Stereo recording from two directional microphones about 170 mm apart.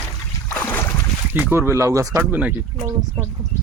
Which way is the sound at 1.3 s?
10° right (ahead or behind).